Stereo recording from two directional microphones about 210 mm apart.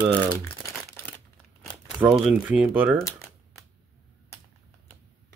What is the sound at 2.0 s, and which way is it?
Speech, 10° right (ahead or behind).